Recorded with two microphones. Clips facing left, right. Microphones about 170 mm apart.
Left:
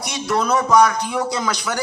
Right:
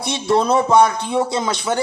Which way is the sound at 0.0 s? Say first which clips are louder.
Right 4 dB; 25° right (ahead or behind).